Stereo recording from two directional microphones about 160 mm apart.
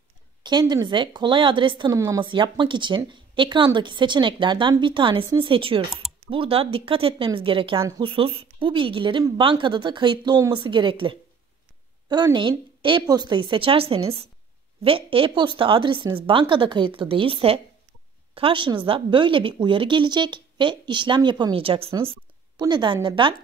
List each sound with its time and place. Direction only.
0.4 s a woman's voice: 25° right (ahead or behind)